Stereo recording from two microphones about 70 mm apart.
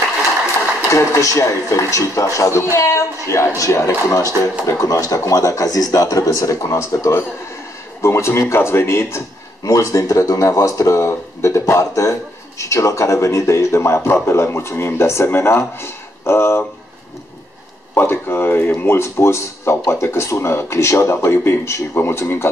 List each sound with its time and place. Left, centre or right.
0.9 s speech: left
9.7 s speech: left
17.9 s speech: left